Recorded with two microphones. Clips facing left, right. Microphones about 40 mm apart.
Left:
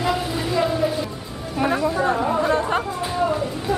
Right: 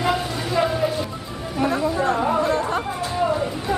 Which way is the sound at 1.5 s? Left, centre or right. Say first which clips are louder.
Left 1 dB; centre.